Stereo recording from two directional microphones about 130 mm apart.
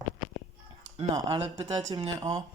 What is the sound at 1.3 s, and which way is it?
Speech, 50° right (ahead or behind).